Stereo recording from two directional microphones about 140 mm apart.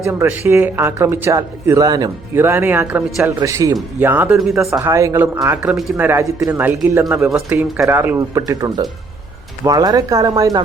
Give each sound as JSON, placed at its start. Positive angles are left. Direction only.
{"t": 0.0, "sound": "speech", "side_deg": -15}
{"t": 2.3, "sound": "speech", "side_deg": -15}
{"t": 3.4, "sound": "speech", "side_deg": -25}
{"t": 4.4, "sound": "speech", "side_deg": 0}
{"t": 4.8, "sound": "speech", "side_deg": -20}
{"t": 5.6, "sound": "speech", "side_deg": -5}
{"t": 6.1, "sound": "speech", "side_deg": -20}
{"t": 7.9, "sound": "speech", "side_deg": -15}